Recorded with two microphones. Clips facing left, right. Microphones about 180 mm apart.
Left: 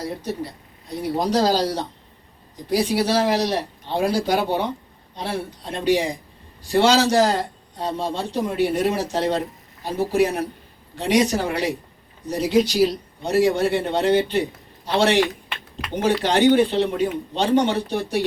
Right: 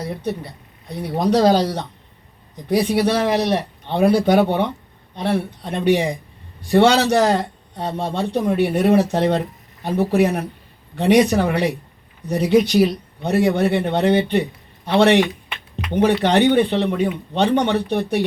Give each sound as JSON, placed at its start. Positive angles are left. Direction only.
{"t": 1.2, "sound": "a man's voice", "side_deg": -60}